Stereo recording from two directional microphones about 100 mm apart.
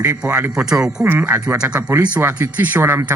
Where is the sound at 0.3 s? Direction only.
10° right (ahead or behind).